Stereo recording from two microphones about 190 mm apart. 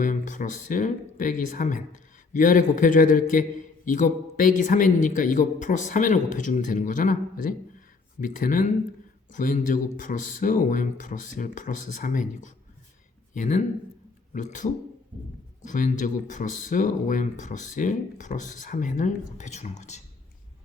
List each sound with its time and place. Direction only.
0.0 s a man's voice: 40° left (ahead or behind)